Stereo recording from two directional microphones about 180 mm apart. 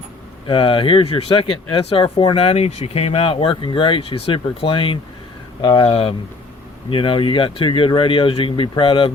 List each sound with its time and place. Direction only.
0.4 s speech: 30° left (ahead or behind)